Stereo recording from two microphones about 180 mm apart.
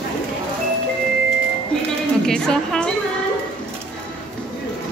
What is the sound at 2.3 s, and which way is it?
Speech, 5° left (ahead or behind).